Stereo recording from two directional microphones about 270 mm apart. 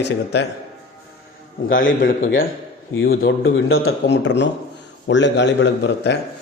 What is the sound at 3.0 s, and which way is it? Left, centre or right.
Speech, left.